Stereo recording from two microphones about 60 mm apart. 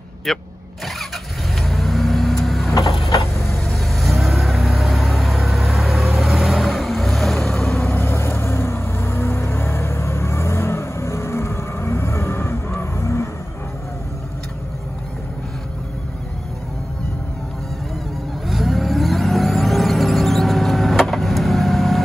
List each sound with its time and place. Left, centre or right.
0.3 s speech: centre
1.6 s vehicle: centre
7.8 s vehicle: left
18.5 s vehicle: centre